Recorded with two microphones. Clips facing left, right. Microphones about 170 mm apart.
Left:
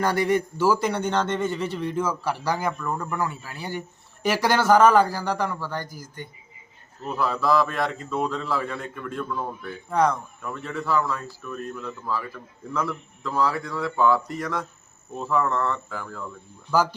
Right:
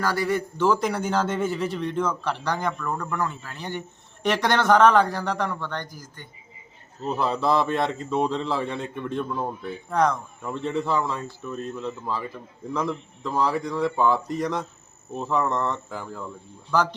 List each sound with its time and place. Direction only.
0.0 s a man's voice: 20° left (ahead or behind)
7.0 s a man's voice: 25° right (ahead or behind)
9.9 s a man's voice: centre (ahead or behind)
10.4 s a man's voice: 25° right (ahead or behind)
16.7 s speech: 5° left (ahead or behind)